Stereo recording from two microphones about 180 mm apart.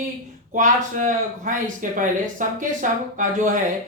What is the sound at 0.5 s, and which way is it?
Speech, 45° right (ahead or behind).